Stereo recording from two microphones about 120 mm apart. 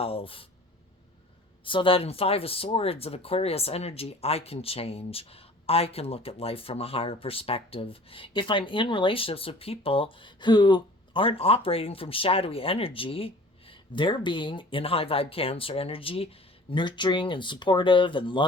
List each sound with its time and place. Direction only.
0.0 s speech: 50° left (ahead or behind)
1.6 s speech: 45° left (ahead or behind)
16.7 s speech: 40° left (ahead or behind)